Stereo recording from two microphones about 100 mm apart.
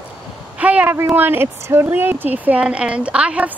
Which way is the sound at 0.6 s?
15° right (ahead or behind).